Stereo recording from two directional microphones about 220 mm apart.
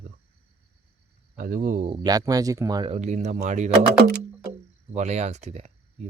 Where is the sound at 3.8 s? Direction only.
50° right (ahead or behind).